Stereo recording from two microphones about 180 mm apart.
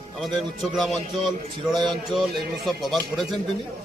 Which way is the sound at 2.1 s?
Centre (ahead or behind).